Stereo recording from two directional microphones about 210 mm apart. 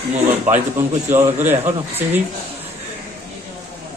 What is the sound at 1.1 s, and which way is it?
A woman's voice, 10° right (ahead or behind).